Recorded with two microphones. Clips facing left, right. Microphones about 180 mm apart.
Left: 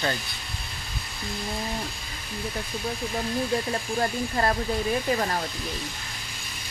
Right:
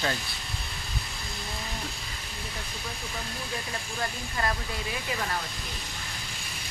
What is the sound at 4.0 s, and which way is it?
Speech, 40° left (ahead or behind).